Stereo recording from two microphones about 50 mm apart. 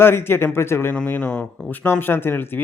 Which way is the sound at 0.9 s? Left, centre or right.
Left.